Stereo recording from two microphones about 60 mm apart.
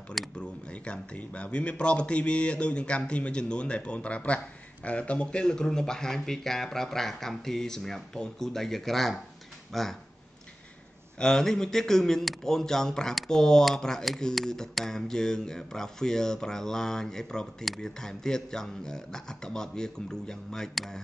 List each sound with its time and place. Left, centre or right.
0.4 s speech: centre
11.1 s speech: centre